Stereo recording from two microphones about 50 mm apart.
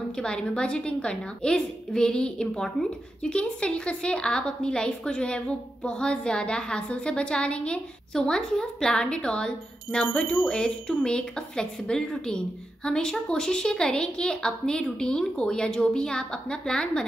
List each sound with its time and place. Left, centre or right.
0.2 s a woman's voice: centre